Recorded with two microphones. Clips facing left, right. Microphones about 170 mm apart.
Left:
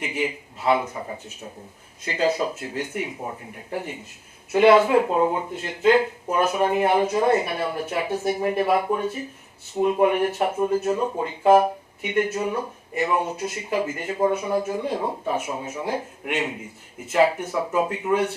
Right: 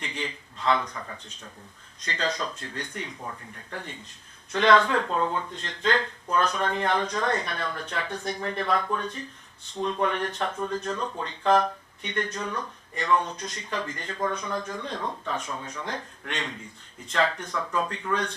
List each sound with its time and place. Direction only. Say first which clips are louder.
0.0 s a man's voice: left 8 dB; 10° left (ahead or behind)
0.9 s speech: left 6 dB; 20° left (ahead or behind)
2.0 s speech: left 7 dB; 10° left (ahead or behind)
3.2 s speech: left 6 dB; 20° left (ahead or behind)